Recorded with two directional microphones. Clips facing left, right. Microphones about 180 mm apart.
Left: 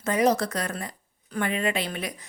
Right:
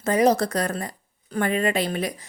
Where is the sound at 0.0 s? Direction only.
35° right (ahead or behind).